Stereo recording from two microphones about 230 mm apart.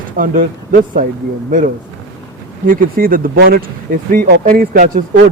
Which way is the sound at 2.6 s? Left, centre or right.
Right.